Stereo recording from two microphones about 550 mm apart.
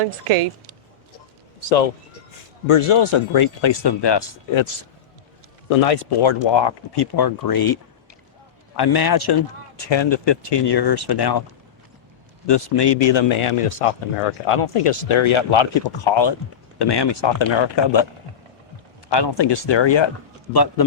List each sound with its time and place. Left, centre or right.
2.6 s a man's voice: left
5.6 s speech: left
12.5 s a man's voice: left
19.1 s speech: left